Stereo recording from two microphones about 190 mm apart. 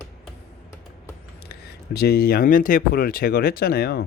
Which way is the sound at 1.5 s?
55° left (ahead or behind).